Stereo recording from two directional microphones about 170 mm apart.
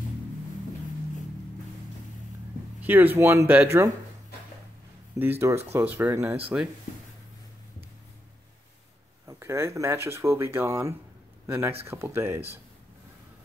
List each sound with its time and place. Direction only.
2.8 s speech: 10° right (ahead or behind)
5.2 s speech: 15° right (ahead or behind)
6.4 s speech: 5° right (ahead or behind)
9.4 s speech: 15° right (ahead or behind)